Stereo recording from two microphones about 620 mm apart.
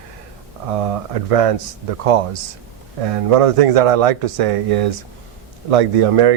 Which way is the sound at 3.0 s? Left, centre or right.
Right.